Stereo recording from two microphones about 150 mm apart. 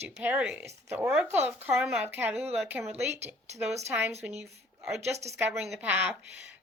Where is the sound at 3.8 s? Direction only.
15° right (ahead or behind).